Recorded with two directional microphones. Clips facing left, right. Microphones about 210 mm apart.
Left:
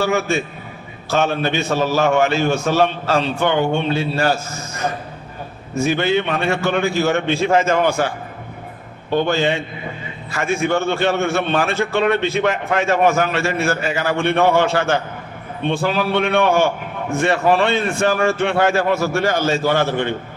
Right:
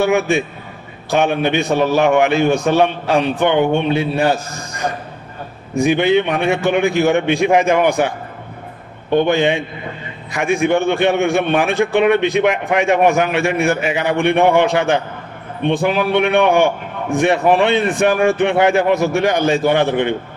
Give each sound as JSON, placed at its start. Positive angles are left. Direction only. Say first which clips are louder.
{"t": 0.0, "sound": "a man's voice", "louder": "right 4 dB", "side_deg": -15}
{"t": 9.1, "sound": "a man's voice", "louder": "right 4 dB", "side_deg": -15}